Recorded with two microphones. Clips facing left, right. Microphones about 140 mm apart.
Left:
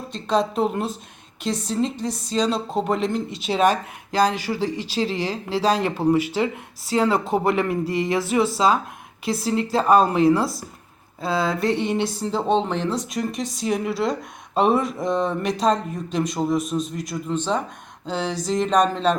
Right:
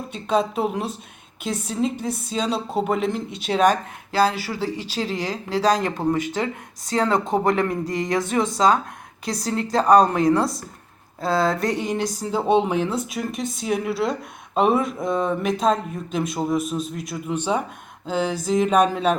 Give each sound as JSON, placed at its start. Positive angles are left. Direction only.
{"t": 0.1, "sound": "speech", "side_deg": -5}
{"t": 5.2, "sound": "speech", "side_deg": 10}
{"t": 17.3, "sound": "speech", "side_deg": -10}